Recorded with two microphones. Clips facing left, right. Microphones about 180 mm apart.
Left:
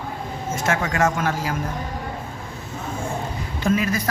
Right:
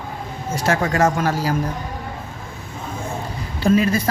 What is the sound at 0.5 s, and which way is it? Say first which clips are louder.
Speech: right 4 dB; 35° right (ahead or behind).